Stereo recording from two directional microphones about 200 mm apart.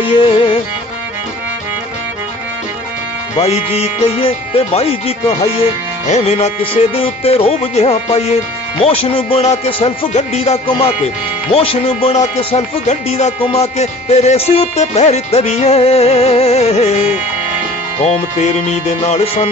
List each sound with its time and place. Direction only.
0.3 s music: 25° left (ahead or behind)
3.3 s speech: 30° left (ahead or behind)
8.8 s music: 30° left (ahead or behind)
11.5 s speech: 30° left (ahead or behind)
18.0 s speech: 35° left (ahead or behind)